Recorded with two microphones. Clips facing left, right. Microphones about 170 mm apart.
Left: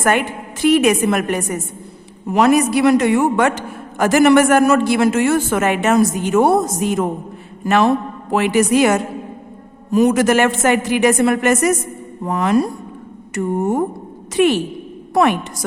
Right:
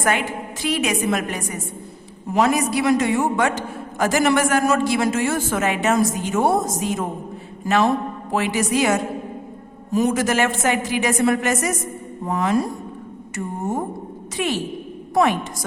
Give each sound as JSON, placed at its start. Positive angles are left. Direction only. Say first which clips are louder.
{"t": 0.0, "sound": "a man's voice", "louder": "left 4 dB", "side_deg": 55}
{"t": 7.6, "sound": "a sound", "louder": "left 4 dB", "side_deg": 65}
{"t": 8.3, "sound": "a man's voice", "louder": "left 7 dB", "side_deg": 65}
{"t": 14.3, "sound": "a man's voice", "louder": "left 9 dB", "side_deg": 60}